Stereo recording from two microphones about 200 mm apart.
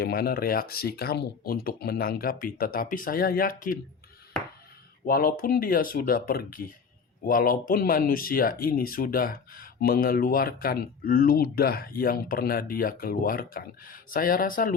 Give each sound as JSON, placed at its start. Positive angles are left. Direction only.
{"t": 0.0, "sound": "speech", "side_deg": 50}
{"t": 5.0, "sound": "speech", "side_deg": 45}